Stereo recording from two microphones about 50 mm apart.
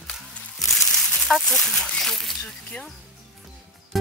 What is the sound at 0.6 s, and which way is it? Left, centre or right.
Music, centre.